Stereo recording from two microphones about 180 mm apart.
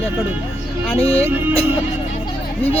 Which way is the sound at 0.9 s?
35° left (ahead or behind).